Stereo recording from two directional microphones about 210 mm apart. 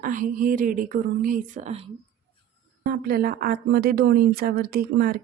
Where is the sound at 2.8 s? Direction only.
45° right (ahead or behind).